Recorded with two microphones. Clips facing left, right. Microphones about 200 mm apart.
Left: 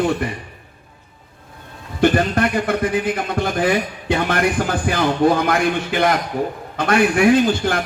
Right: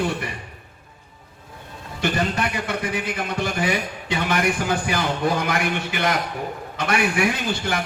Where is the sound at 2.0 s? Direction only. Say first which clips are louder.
Left 7 dB; 55° left (ahead or behind).